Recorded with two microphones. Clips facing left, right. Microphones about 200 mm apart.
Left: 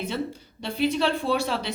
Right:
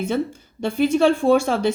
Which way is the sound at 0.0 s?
50° right (ahead or behind).